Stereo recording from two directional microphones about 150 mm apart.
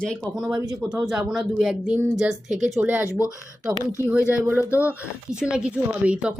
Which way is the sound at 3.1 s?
20° left (ahead or behind).